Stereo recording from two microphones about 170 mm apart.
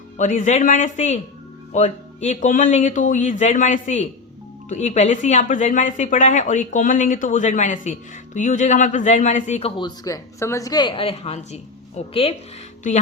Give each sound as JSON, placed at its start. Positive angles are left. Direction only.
{"t": 0.2, "sound": "speech", "side_deg": 45}